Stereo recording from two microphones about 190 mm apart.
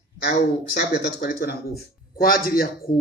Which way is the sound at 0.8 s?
50° left (ahead or behind).